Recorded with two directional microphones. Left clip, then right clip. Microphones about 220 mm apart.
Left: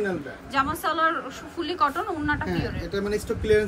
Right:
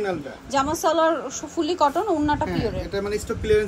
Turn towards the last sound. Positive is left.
turn(degrees=0)  # may be behind; listen again after turning